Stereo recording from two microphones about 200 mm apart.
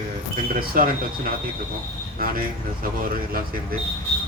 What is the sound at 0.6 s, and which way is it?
Speech, 45° right (ahead or behind).